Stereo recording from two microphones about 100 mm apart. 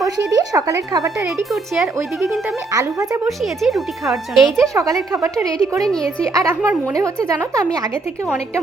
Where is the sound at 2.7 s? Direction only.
40° right (ahead or behind).